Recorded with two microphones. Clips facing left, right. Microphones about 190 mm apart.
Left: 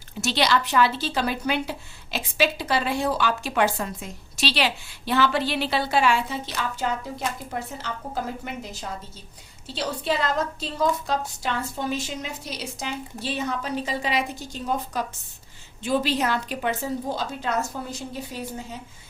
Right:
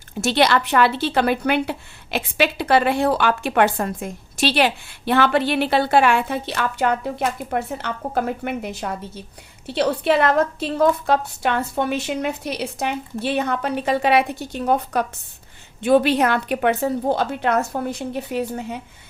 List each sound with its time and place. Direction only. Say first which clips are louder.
0.2 s speech: right 5 dB; 55° right (ahead or behind)